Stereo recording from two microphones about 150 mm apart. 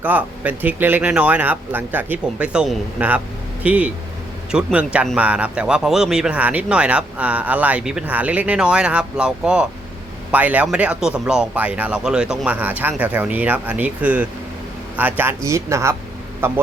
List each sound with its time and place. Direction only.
0.0 s speech: 10° right (ahead or behind)